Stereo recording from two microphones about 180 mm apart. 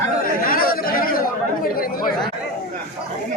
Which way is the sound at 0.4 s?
55° left (ahead or behind).